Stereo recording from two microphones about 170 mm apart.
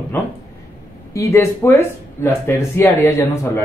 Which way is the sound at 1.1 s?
15° left (ahead or behind).